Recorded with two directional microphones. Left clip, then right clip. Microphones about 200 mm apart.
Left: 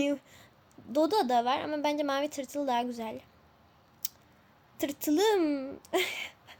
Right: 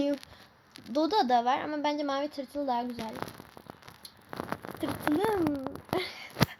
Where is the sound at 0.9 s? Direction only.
5° left (ahead or behind).